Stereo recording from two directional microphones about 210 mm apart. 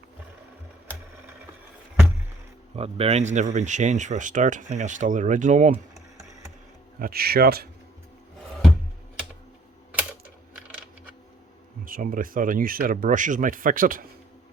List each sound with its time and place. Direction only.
2.7 s speech: 30° right (ahead or behind)
7.0 s speech: 45° right (ahead or behind)
11.9 s speech: 40° right (ahead or behind)